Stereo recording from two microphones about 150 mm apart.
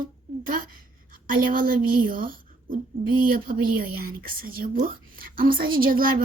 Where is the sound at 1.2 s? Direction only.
70° right (ahead or behind).